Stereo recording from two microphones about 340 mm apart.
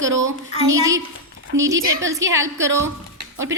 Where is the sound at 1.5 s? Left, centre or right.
Right.